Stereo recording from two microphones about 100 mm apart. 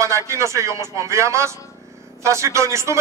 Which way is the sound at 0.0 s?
30° right (ahead or behind).